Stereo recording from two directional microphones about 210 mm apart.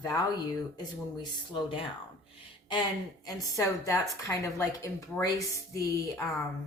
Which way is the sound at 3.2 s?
15° left (ahead or behind).